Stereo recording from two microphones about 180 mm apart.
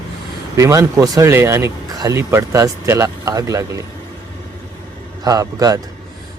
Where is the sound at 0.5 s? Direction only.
15° right (ahead or behind).